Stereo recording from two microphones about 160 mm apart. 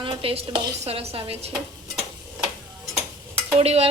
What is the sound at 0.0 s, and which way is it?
A woman's voice, 35° right (ahead or behind).